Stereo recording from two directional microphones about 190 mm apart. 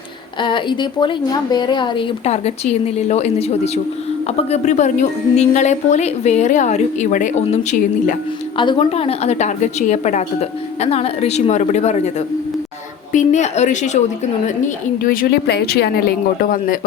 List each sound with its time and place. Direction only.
0.4 s a woman's voice: 25° left (ahead or behind)
13.1 s a woman's voice: 40° left (ahead or behind)
15.0 s a man's voice: 45° left (ahead or behind)